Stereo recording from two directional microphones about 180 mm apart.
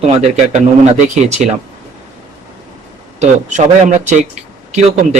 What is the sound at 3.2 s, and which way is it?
Speech, 45° right (ahead or behind).